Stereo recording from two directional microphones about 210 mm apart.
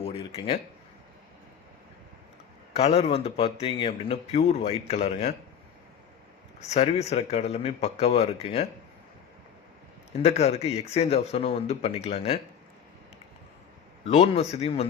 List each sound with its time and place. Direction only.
0.0 s a sound: 25° left (ahead or behind)
2.7 s a man's voice: 30° left (ahead or behind)
6.6 s speech: 30° left (ahead or behind)
10.1 s a man's voice: 30° left (ahead or behind)
14.0 s a man's voice: 30° left (ahead or behind)